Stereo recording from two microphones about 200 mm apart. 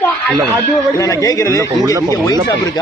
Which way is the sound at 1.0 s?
15° left (ahead or behind).